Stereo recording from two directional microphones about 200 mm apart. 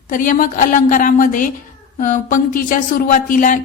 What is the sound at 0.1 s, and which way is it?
A woman's voice, 45° left (ahead or behind).